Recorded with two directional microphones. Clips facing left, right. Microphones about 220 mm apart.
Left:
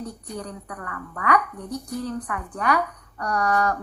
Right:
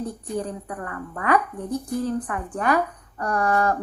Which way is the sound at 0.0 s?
50° right (ahead or behind).